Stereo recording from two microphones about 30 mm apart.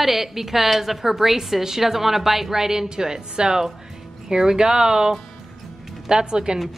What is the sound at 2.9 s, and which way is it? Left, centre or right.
Speech, right.